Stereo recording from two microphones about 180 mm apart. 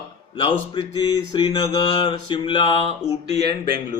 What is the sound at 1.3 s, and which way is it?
Mantra, 20° left (ahead or behind).